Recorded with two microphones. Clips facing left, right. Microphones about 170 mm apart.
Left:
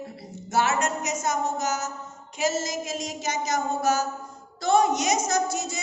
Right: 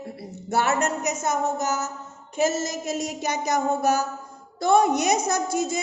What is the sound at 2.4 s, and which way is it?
Child singing, 60° right (ahead or behind).